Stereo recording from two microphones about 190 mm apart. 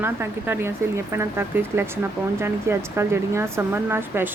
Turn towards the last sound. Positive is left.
turn(degrees=-10)  # may be behind; listen again after turning